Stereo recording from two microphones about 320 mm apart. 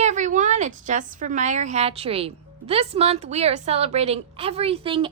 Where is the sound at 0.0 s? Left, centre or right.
Right.